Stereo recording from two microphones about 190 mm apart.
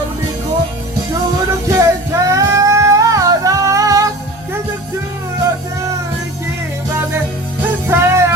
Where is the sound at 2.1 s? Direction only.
15° right (ahead or behind).